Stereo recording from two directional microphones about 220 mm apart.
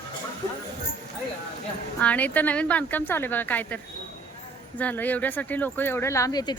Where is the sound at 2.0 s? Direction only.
5° left (ahead or behind).